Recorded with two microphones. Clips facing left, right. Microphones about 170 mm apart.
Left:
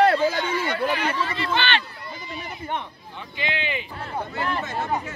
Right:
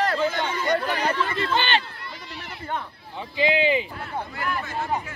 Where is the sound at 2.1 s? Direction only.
70° right (ahead or behind).